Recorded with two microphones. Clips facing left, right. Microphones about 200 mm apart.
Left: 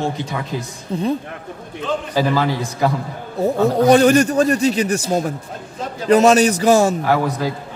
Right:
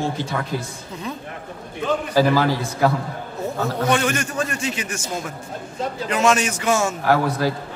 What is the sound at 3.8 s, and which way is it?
A man's voice, 35° left (ahead or behind).